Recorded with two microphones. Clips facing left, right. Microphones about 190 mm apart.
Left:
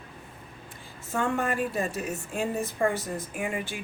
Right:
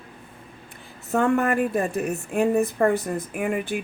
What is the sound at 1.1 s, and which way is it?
Speech, 60° right (ahead or behind).